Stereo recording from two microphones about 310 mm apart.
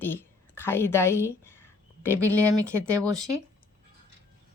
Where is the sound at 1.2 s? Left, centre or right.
Centre.